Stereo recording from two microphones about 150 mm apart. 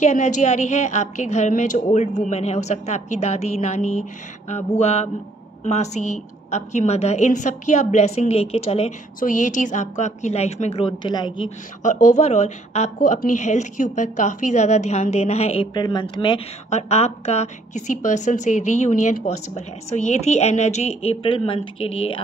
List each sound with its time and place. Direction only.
0.0 s a woman's voice: 50° left (ahead or behind)
9.2 s a woman's voice: 55° left (ahead or behind); by 11.5 s 30° left (ahead or behind)
11.8 s a woman's voice: 55° left (ahead or behind)
15.7 s speech: 30° left (ahead or behind)
16.7 s a woman's voice: 45° left (ahead or behind)